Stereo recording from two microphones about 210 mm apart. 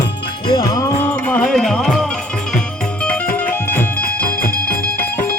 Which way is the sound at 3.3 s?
10° left (ahead or behind).